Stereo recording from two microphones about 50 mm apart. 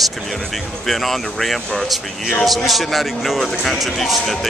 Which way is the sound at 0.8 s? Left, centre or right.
Centre.